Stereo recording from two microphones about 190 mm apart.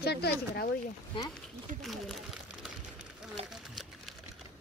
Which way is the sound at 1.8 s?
Centre (ahead or behind).